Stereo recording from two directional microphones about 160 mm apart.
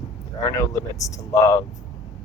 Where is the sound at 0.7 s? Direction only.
20° left (ahead or behind).